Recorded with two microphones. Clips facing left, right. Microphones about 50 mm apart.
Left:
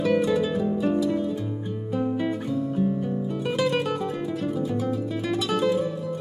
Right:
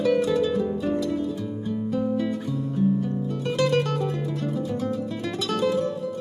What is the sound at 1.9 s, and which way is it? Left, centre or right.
Guitar, centre.